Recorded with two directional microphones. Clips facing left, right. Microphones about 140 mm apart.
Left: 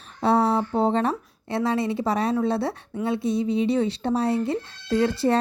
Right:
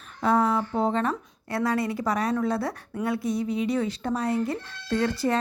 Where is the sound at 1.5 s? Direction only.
25° left (ahead or behind).